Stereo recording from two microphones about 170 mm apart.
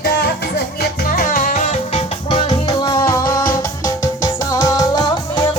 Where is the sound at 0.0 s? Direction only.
75° left (ahead or behind).